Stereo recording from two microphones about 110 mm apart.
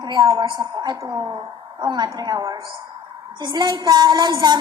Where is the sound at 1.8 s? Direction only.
40° right (ahead or behind).